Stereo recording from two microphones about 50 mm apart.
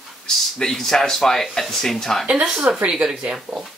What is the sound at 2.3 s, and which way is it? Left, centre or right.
Speech, right.